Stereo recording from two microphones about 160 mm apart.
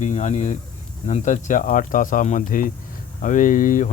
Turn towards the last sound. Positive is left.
turn(degrees=55)  # may be behind; listen again after turning